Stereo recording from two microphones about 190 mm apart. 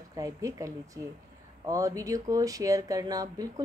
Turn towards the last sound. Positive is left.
turn(degrees=-20)  # may be behind; listen again after turning